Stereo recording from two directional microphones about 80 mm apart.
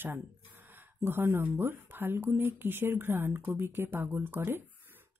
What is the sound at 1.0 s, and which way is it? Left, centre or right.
A woman's voice, right.